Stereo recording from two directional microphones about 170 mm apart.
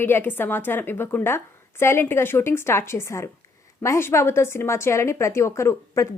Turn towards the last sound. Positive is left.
turn(degrees=15)  # may be behind; listen again after turning